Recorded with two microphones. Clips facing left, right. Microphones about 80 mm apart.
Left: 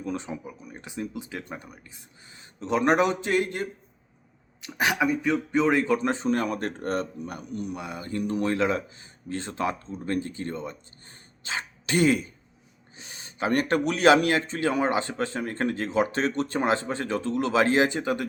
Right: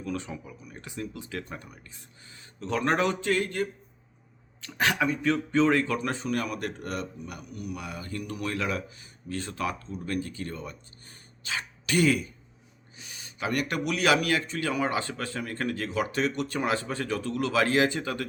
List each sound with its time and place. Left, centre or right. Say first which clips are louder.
0.0 s speech: left 2 dB; left